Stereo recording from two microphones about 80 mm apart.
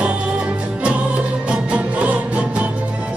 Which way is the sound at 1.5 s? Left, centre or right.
Centre.